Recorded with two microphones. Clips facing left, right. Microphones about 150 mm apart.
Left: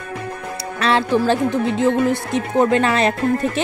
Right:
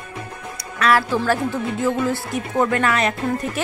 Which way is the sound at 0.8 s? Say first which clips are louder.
Left 1 dB; 25° left (ahead or behind).